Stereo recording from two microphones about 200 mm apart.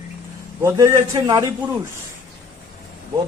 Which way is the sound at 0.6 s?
15° right (ahead or behind).